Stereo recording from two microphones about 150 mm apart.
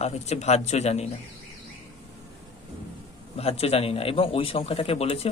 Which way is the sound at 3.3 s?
45° left (ahead or behind).